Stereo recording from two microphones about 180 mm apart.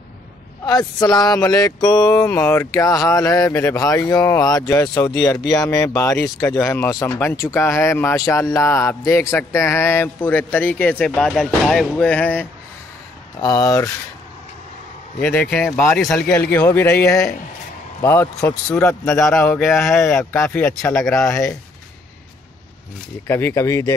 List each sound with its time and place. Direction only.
0.7 s speech: 20° left (ahead or behind)
13.4 s speech: 20° left (ahead or behind)
15.5 s speech: 5° left (ahead or behind)
23.2 s speech: 15° left (ahead or behind)